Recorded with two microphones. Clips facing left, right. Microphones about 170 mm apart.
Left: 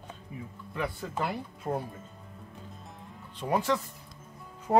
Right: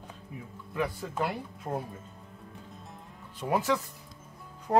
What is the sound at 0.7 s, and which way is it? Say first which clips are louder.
Speech: right 2 dB; centre (ahead or behind).